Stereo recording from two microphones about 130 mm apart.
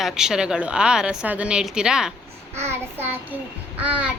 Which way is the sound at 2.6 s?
20° right (ahead or behind).